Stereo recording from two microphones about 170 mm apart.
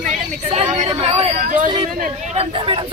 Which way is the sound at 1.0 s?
35° right (ahead or behind).